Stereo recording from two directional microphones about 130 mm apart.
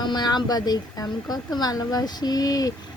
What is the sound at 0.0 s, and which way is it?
A woman's voice, 35° left (ahead or behind).